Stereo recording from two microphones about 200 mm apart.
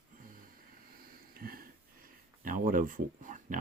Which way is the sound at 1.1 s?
45° right (ahead or behind).